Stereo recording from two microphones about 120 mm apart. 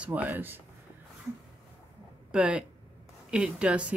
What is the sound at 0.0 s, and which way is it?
Speech, 15° right (ahead or behind).